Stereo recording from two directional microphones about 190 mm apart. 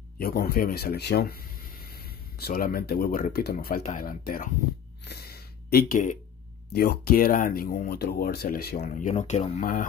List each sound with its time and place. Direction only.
0.2 s speech: 55° left (ahead or behind)
5.0 s a sound: 55° left (ahead or behind)
6.7 s speech: 55° left (ahead or behind)
8.8 s speech: 40° left (ahead or behind)